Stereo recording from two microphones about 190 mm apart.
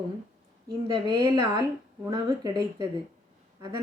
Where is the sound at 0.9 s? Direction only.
20° right (ahead or behind).